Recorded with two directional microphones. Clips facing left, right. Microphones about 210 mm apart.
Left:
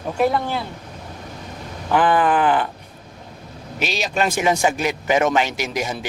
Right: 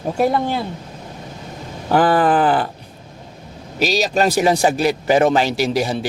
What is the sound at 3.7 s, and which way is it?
Speech, 40° right (ahead or behind).